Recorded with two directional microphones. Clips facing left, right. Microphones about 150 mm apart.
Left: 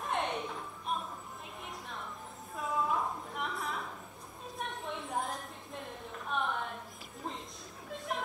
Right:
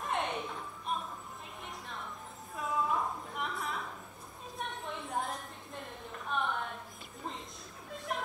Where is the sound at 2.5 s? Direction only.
Centre (ahead or behind).